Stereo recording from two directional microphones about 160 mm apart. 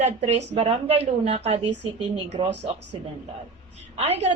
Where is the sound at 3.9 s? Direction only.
40° right (ahead or behind).